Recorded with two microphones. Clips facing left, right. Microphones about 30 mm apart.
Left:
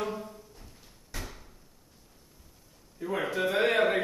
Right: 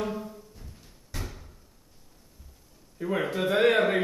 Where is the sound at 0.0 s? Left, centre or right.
Centre.